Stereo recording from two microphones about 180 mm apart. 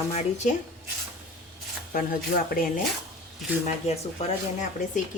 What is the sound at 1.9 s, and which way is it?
Speech, 50° left (ahead or behind).